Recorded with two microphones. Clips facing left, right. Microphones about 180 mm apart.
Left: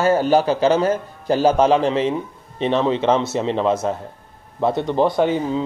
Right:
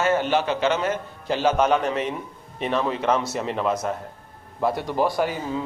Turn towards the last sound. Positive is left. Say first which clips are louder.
# left 6 dB
turn(degrees=25)  # may be behind; listen again after turning